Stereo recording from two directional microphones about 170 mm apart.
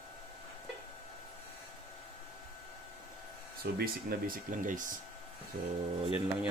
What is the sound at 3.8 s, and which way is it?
Speech, 60° right (ahead or behind).